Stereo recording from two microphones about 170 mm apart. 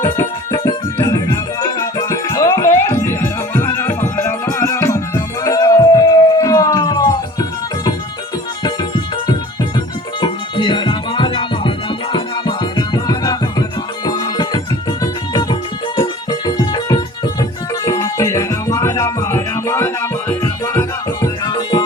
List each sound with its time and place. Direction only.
0.5 s music: 25° left (ahead or behind)
10.2 s music: 25° left (ahead or behind)